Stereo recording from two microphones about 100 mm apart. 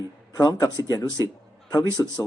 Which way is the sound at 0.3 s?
40° left (ahead or behind).